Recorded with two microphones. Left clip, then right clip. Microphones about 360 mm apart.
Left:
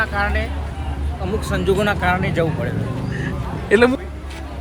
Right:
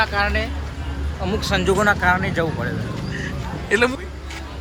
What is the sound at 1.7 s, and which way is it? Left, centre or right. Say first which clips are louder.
Speech: right 3 dB; centre.